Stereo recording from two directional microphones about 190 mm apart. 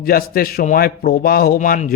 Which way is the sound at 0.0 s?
50° left (ahead or behind).